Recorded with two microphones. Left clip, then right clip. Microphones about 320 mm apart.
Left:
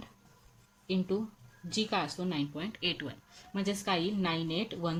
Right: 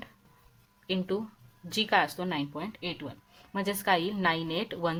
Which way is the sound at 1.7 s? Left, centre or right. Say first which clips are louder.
Right 7 dB; right.